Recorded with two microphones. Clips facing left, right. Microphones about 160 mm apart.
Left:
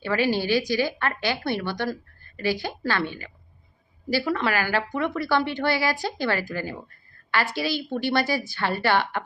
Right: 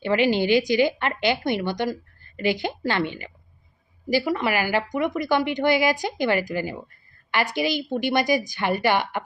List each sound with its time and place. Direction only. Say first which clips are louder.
0.0 s a woman's voice: right 3 dB; 20° right (ahead or behind)